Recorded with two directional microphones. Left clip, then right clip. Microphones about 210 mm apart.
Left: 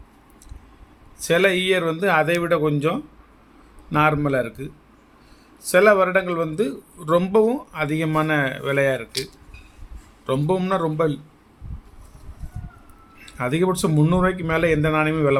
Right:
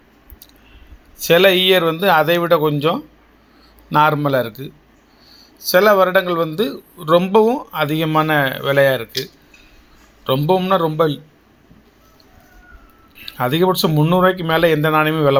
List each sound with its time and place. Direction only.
1.2 s speech: 20° right (ahead or behind)
5.7 s speech: 15° right (ahead or behind)
10.2 s speech: 15° right (ahead or behind)
13.1 s speech: 15° right (ahead or behind)